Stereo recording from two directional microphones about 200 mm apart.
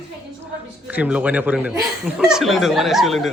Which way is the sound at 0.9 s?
5° right (ahead or behind).